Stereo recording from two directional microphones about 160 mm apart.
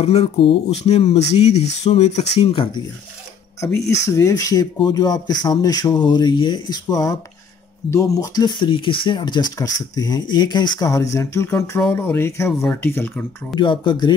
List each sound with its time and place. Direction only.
0.0 s speech: 40° left (ahead or behind)
3.8 s speech: 90° left
4.1 s speech: 20° left (ahead or behind)
13.6 s speech: 30° left (ahead or behind)